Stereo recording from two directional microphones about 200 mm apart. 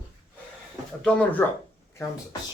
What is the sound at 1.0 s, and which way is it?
Speech, 5° left (ahead or behind).